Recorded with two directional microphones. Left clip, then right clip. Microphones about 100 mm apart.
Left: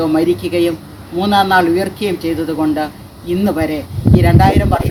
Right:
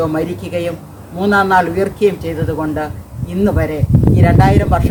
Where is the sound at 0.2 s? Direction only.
15° right (ahead or behind).